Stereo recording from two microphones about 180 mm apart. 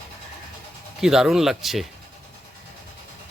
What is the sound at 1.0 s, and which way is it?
Speech, 5° right (ahead or behind).